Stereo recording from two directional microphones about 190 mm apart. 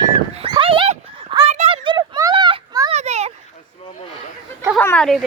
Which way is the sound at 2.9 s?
35° right (ahead or behind).